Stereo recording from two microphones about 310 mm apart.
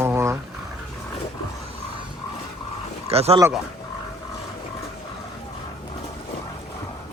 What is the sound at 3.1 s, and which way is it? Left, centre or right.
Speech, centre.